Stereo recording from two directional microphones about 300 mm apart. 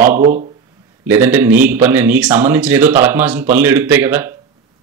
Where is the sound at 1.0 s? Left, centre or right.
Centre.